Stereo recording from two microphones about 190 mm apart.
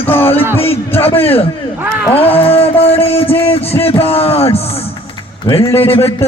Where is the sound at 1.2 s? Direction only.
30° left (ahead or behind).